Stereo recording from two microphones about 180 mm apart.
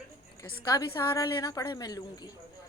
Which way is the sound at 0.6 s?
20° left (ahead or behind).